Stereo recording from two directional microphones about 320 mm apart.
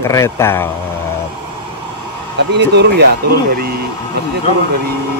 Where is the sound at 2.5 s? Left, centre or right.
Right.